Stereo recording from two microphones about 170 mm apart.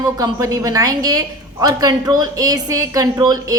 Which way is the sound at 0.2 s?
20° right (ahead or behind).